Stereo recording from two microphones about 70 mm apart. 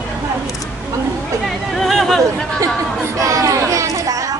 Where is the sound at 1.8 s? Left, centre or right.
Centre.